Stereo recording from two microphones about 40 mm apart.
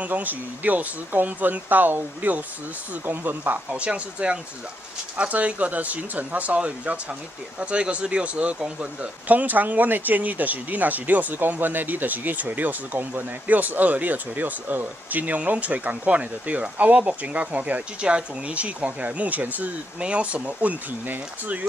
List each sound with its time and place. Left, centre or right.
0.0 s speech: right
3.1 s speech: right
3.7 s speech: right
9.3 s speech: right
11.3 s speech: right
18.0 s speech: right
20.0 s speech: right